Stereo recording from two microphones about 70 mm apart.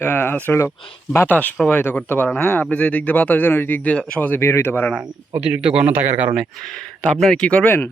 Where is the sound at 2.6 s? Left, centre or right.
Centre.